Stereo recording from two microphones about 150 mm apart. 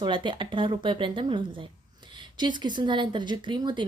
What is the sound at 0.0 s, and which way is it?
A woman's voice, 30° right (ahead or behind).